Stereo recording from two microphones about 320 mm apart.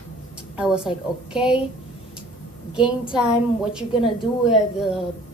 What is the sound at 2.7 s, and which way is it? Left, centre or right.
A woman's voice, centre.